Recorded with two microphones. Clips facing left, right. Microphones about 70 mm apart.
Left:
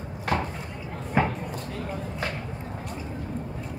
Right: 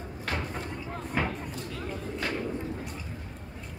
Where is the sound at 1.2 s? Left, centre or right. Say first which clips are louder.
Left 6 dB; centre.